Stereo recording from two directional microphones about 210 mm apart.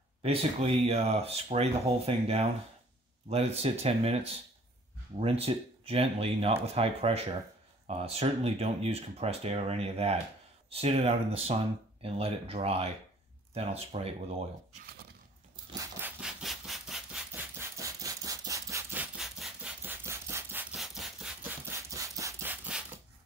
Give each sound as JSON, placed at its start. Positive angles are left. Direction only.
{"t": 0.2, "sound": "speech", "side_deg": -30}
{"t": 16.0, "sound": "rub", "side_deg": -5}
{"t": 17.3, "sound": "wood", "side_deg": -10}
{"t": 20.0, "sound": "wood", "side_deg": -10}
{"t": 20.7, "sound": "rub", "side_deg": 0}